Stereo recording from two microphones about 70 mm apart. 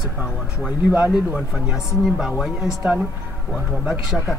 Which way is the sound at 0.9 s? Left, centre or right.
Centre.